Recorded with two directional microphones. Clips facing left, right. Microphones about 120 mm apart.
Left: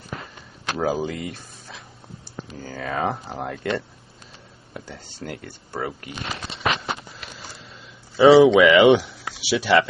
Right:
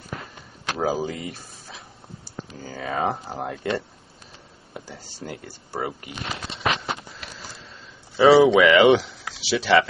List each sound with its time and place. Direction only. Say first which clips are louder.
0.7 s speech: left 1 dB; centre (ahead or behind)
1.2 s speech: left 2 dB; 15° right (ahead or behind)
2.8 s speech: even; centre (ahead or behind)
4.7 s a sound: left 1 dB; 10° right (ahead or behind)
5.8 s speech: even; 20° right (ahead or behind)
8.2 s speech: left 2 dB; centre (ahead or behind)